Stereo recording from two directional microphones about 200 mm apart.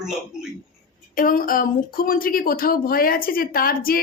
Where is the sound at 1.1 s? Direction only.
45° left (ahead or behind).